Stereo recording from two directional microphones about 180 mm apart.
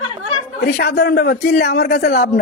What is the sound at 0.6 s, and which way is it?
A man's voice, 65° left (ahead or behind).